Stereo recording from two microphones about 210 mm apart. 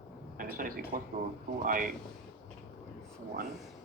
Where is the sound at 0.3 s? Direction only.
40° right (ahead or behind).